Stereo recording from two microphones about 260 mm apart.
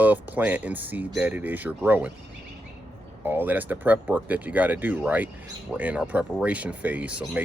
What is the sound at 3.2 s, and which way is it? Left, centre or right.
Speech, centre.